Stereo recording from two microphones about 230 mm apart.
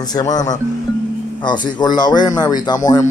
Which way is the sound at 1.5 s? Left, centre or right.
Centre.